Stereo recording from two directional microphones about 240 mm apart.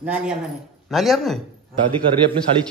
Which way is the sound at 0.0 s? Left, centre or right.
Centre.